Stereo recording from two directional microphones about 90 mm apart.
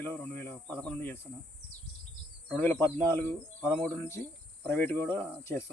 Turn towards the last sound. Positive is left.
turn(degrees=20)  # may be behind; listen again after turning